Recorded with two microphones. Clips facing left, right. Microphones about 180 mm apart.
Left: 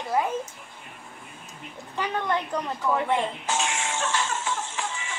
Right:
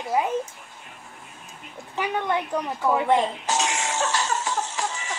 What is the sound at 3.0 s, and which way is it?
Music, 35° right (ahead or behind).